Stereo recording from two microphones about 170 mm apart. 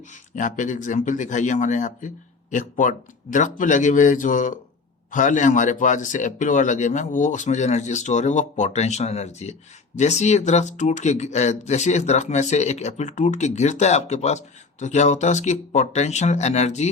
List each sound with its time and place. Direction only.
0.1 s speech: 50° left (ahead or behind)